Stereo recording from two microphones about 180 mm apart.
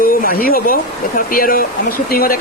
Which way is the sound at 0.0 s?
55° left (ahead or behind).